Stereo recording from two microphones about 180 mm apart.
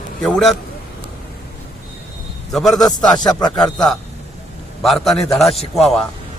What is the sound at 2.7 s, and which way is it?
Speech, 20° left (ahead or behind).